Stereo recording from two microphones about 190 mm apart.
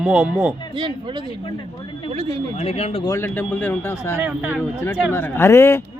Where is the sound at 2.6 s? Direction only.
35° left (ahead or behind).